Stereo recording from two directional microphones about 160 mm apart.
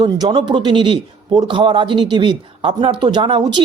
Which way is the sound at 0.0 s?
30° right (ahead or behind).